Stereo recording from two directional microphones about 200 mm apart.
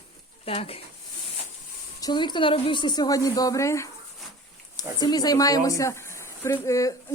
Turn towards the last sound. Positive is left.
turn(degrees=15)  # may be behind; listen again after turning